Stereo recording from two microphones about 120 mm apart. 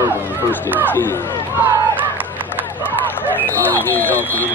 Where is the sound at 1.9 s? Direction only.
15° right (ahead or behind).